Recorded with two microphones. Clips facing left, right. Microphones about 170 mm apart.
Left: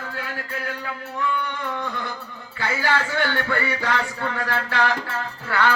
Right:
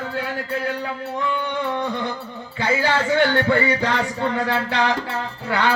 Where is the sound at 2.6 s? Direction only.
20° right (ahead or behind).